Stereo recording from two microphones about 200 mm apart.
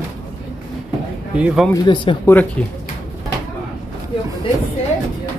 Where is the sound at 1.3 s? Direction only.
5° right (ahead or behind).